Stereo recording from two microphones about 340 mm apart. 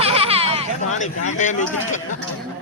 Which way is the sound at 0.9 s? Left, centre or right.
Left.